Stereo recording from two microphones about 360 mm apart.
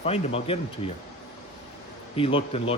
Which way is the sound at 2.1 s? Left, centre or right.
Centre.